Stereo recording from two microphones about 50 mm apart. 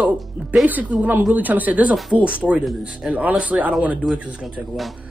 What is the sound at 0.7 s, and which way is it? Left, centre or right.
Speech, right.